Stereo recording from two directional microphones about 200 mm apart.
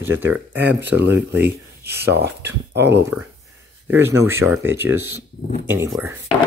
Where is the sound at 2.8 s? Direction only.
10° right (ahead or behind).